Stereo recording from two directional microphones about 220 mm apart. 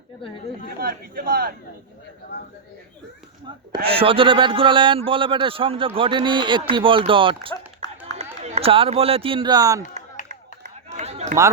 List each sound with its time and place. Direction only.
0.8 s speech: 40° right (ahead or behind)
2.3 s speech: 45° left (ahead or behind)
3.8 s a man's voice: 25° right (ahead or behind)
7.5 s run: 15° left (ahead or behind)
8.2 s speech: 30° right (ahead or behind)
10.2 s run: 35° right (ahead or behind)